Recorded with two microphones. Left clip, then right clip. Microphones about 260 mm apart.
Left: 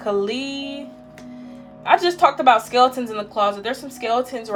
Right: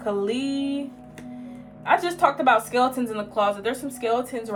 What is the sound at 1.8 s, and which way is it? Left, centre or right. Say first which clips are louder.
Speech: left 5 dB; left.